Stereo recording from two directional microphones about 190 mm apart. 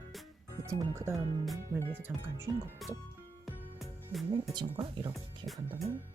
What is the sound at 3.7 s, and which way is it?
Music, centre (ahead or behind).